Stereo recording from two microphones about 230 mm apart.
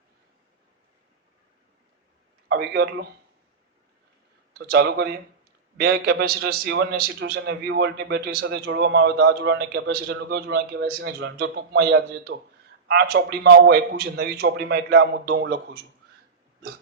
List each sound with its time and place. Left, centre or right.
2.5 s a man's voice: right
4.5 s a man's voice: right